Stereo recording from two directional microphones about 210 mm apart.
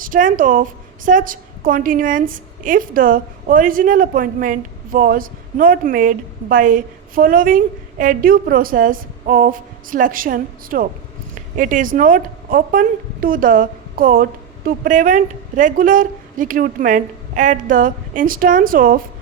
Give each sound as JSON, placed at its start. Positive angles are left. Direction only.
{"t": 0.0, "sound": "a woman's voice", "side_deg": -40}